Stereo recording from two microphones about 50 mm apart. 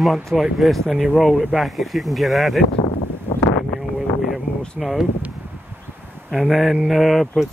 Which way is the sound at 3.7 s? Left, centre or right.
Centre.